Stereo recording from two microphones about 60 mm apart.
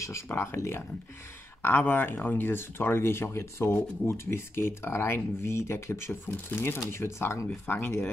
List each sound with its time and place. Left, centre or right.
0.3 s speech: left
1.6 s speech: left